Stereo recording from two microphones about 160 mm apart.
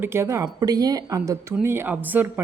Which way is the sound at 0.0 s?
15° right (ahead or behind).